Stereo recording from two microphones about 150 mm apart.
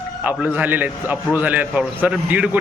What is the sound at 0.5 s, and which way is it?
A man's voice, 10° right (ahead or behind).